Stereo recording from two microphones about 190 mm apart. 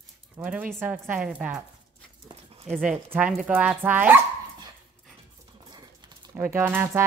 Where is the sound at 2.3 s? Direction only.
30° right (ahead or behind).